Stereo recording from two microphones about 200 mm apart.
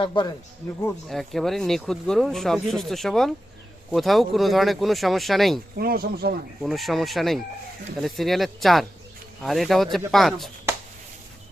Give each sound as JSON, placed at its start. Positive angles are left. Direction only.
{"t": 0.0, "sound": "a man's voice", "side_deg": 20}
{"t": 0.8, "sound": "speech", "side_deg": 5}
{"t": 5.7, "sound": "speech", "side_deg": -50}
{"t": 6.6, "sound": "speech", "side_deg": 0}